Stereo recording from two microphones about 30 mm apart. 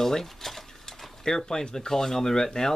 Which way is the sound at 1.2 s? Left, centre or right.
Centre.